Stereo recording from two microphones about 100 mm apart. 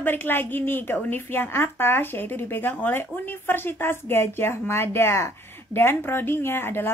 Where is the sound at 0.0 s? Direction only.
20° left (ahead or behind).